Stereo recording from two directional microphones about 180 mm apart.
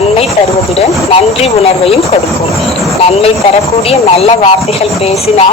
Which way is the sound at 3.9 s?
35° left (ahead or behind).